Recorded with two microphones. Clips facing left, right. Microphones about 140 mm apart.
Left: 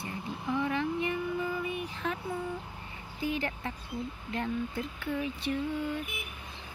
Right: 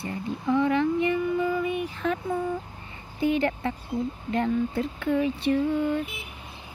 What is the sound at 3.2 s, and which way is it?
Speech, 70° right (ahead or behind).